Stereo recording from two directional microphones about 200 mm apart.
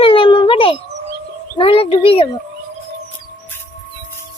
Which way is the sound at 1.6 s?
30° left (ahead or behind).